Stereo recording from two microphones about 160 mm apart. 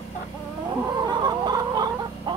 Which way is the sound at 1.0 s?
25° right (ahead or behind).